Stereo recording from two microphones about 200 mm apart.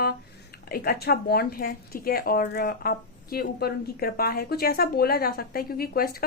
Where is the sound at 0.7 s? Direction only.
50° left (ahead or behind).